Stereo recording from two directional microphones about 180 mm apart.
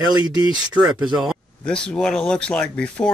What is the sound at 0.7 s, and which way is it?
Speech, 5° right (ahead or behind).